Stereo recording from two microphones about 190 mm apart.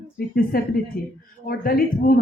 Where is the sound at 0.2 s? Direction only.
50° left (ahead or behind).